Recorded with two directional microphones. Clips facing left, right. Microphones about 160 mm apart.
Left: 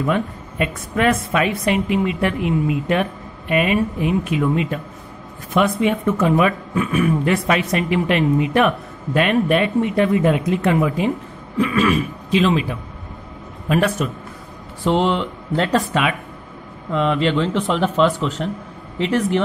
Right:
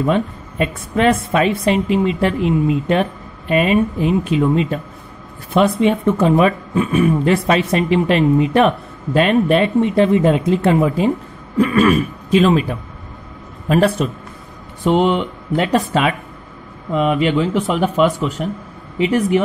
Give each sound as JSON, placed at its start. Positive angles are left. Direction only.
{"t": 0.0, "sound": "speech", "side_deg": -30}
{"t": 11.5, "sound": "speech", "side_deg": -45}
{"t": 13.7, "sound": "a man's voice", "side_deg": -30}
{"t": 14.8, "sound": "speech", "side_deg": -15}
{"t": 15.9, "sound": "a man's voice", "side_deg": -35}
{"t": 16.9, "sound": "speech", "side_deg": -15}